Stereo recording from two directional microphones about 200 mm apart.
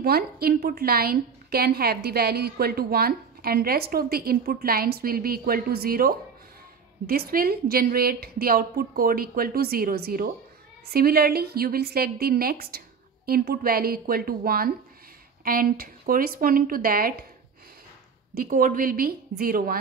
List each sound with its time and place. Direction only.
0.0 s a woman's voice: 50° right (ahead or behind)
18.3 s a woman's voice: 45° right (ahead or behind)